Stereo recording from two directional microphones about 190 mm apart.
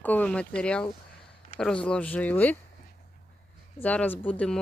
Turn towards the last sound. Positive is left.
turn(degrees=5)  # may be behind; listen again after turning